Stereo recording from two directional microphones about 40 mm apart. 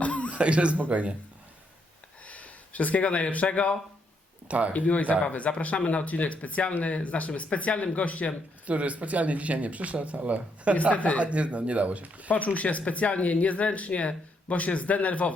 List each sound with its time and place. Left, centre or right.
0.0 s chuckle: left
0.3 s speech: right
2.2 s speech: left
4.4 s speech: right
4.7 s speech: left
8.6 s speech: right
10.9 s speech: left
11.2 s speech: right
12.5 s speech: left